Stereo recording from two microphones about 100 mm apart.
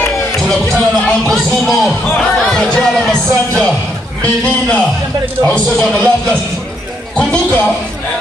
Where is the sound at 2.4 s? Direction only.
5° left (ahead or behind).